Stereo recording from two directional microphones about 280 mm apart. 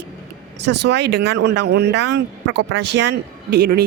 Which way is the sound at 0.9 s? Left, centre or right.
Right.